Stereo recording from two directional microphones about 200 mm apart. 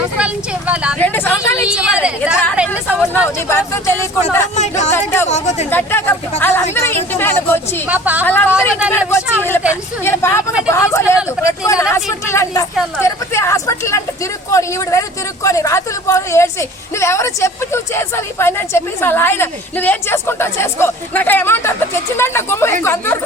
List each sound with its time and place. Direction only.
0.7 s a woman's voice: 5° right (ahead or behind)
0.9 s a woman's voice: 10° left (ahead or behind)
1.6 s a woman's voice: 5° right (ahead or behind)
2.6 s a woman's voice: 10° left (ahead or behind)
4.5 s speech: 35° left (ahead or behind)
5.7 s a woman's voice: 10° left (ahead or behind)
7.9 s speech: 10° right (ahead or behind)
8.2 s a woman's voice: 10° left (ahead or behind)